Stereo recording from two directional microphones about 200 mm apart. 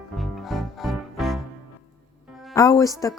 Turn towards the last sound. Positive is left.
turn(degrees=15)  # may be behind; listen again after turning